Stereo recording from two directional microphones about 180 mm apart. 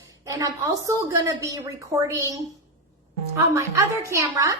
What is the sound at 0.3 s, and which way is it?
Speech, 20° right (ahead or behind).